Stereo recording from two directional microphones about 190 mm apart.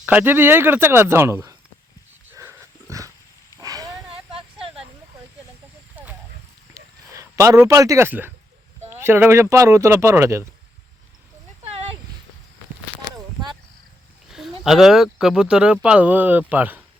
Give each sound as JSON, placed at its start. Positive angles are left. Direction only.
{"t": 0.0, "sound": "speech", "side_deg": -10}
{"t": 2.3, "sound": "dog", "side_deg": -15}
{"t": 3.6, "sound": "livestock", "side_deg": -20}
{"t": 6.8, "sound": "a sound", "side_deg": -15}
{"t": 7.2, "sound": "speech", "side_deg": -15}
{"t": 14.3, "sound": "speech", "side_deg": 0}